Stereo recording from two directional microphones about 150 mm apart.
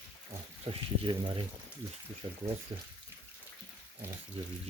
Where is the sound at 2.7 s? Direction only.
35° right (ahead or behind).